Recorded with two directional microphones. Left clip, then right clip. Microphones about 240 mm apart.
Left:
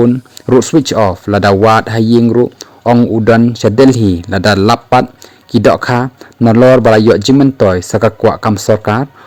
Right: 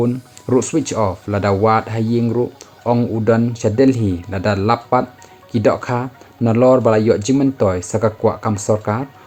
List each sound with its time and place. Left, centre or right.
0.0 s speech: left